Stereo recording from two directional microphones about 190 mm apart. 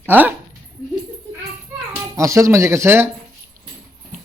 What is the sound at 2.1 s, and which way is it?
Speech, 15° right (ahead or behind).